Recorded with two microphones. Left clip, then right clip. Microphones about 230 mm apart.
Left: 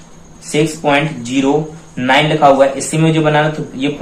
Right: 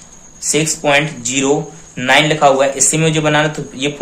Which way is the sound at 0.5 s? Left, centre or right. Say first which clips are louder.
Even; right.